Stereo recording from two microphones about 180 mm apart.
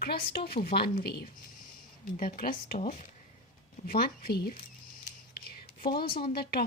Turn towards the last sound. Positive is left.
turn(degrees=60)  # may be behind; listen again after turning